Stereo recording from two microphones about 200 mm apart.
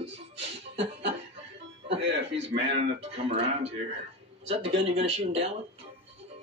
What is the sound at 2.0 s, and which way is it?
Speech, 65° right (ahead or behind).